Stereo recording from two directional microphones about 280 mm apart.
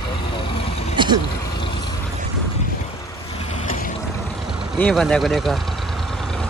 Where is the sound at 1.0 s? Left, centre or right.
Centre.